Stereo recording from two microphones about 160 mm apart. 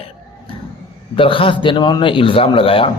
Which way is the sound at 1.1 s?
35° left (ahead or behind).